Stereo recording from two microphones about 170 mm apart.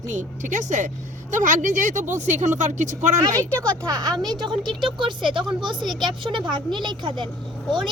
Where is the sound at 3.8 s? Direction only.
20° right (ahead or behind).